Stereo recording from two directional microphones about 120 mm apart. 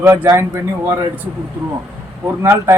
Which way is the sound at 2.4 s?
20° right (ahead or behind).